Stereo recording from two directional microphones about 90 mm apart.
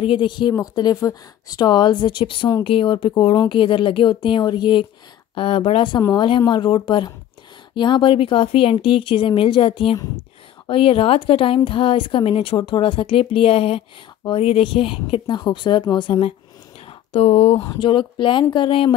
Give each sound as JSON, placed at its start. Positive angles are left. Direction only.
{"t": 0.0, "sound": "speech", "side_deg": 70}
{"t": 0.6, "sound": "speech", "side_deg": 45}
{"t": 2.6, "sound": "speech", "side_deg": 75}
{"t": 5.3, "sound": "speech", "side_deg": 75}
{"t": 16.8, "sound": "a sound", "side_deg": 90}
{"t": 17.6, "sound": "speech", "side_deg": 60}